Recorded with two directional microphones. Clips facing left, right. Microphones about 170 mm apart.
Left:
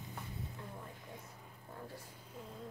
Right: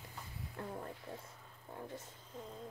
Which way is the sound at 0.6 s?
55° right (ahead or behind).